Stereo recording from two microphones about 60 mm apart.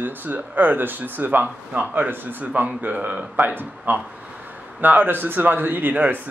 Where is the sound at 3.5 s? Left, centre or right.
Right.